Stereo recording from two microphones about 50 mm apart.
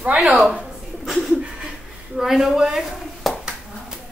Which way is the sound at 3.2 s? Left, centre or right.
Centre.